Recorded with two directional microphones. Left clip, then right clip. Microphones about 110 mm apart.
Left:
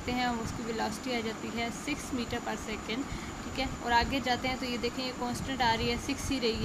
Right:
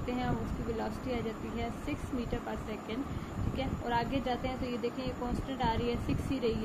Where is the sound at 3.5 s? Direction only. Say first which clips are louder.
Left 5 dB; 25° left (ahead or behind).